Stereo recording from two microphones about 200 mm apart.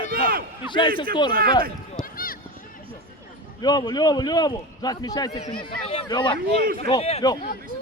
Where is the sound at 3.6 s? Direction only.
20° left (ahead or behind).